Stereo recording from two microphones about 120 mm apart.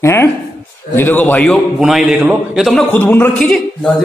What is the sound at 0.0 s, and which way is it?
A man's voice, 20° left (ahead or behind).